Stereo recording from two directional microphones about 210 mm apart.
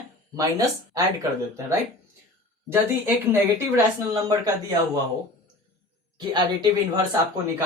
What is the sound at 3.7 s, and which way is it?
Speech, 15° right (ahead or behind).